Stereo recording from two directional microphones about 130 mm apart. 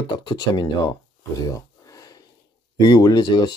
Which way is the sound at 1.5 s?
30° left (ahead or behind).